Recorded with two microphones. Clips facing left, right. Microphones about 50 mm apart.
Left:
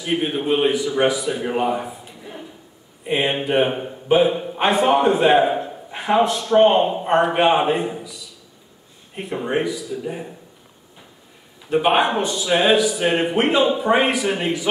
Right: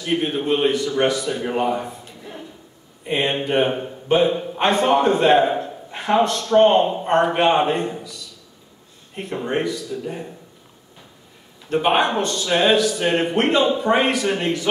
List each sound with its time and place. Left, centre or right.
0.0 s a man's voice: centre
11.6 s a man's voice: centre